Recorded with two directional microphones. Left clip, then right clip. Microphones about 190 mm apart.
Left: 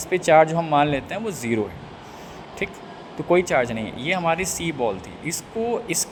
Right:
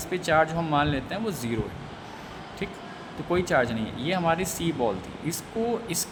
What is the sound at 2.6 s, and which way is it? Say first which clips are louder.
Speech: left 7 dB; 20° left (ahead or behind).